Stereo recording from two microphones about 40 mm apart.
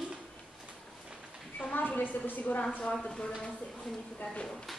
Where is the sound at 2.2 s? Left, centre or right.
Left.